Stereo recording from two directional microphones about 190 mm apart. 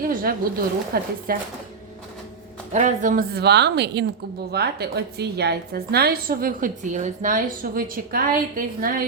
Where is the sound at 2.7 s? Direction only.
40° right (ahead or behind).